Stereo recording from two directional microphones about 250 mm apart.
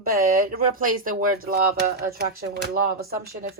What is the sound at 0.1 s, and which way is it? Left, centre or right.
Speech, right.